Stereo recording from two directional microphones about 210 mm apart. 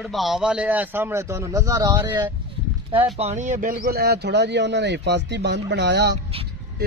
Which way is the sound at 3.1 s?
30° right (ahead or behind).